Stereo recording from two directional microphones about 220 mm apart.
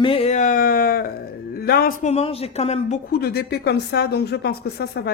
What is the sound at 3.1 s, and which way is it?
Speech, 45° left (ahead or behind).